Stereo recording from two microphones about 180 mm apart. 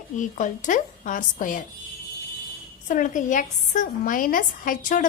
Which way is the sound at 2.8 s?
45° left (ahead or behind).